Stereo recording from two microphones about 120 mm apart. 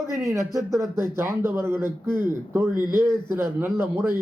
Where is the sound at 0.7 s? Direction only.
25° right (ahead or behind).